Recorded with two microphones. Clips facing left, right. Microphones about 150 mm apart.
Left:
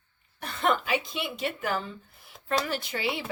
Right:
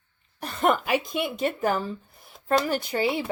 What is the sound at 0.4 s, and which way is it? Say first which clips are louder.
Speech: right 4 dB; 45° right (ahead or behind).